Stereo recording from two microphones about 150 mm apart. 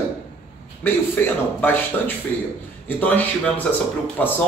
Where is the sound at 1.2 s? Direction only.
10° left (ahead or behind).